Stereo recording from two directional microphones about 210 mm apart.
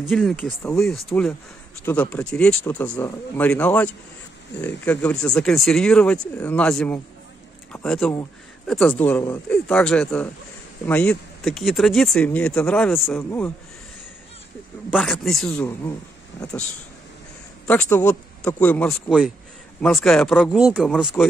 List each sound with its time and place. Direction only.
0.0 s a man's voice: centre (ahead or behind)
14.9 s speech: centre (ahead or behind)
17.6 s a man's voice: 10° left (ahead or behind)